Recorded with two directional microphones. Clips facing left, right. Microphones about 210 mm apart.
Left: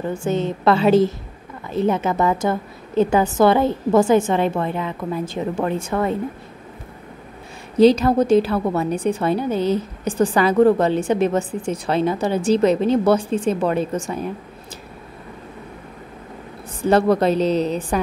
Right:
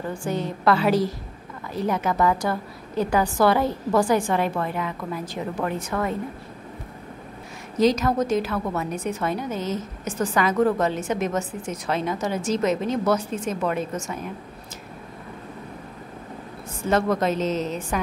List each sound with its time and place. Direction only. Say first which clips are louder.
0.1 s a woman's voice: left 6 dB; 25° left (ahead or behind)
7.7 s a woman's voice: left 7 dB; 30° left (ahead or behind)
16.8 s a woman's voice: left 6 dB; 35° left (ahead or behind)